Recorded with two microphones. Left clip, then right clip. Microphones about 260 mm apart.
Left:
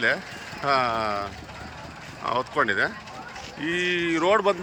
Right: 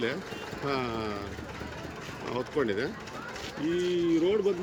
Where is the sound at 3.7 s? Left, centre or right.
Left.